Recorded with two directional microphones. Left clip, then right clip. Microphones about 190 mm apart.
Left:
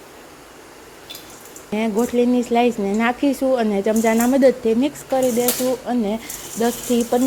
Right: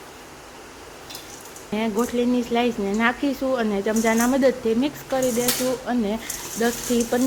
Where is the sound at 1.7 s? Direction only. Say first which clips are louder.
Left 4 dB; 25° left (ahead or behind).